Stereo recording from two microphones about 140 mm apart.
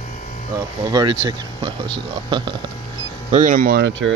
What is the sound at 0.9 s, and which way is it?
Speech, 30° right (ahead or behind).